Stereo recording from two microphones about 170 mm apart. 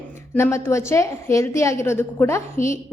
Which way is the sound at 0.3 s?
15° left (ahead or behind).